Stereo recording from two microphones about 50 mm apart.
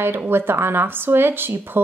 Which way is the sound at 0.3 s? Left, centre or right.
Right.